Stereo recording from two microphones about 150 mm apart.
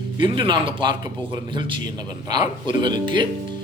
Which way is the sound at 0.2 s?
30° right (ahead or behind).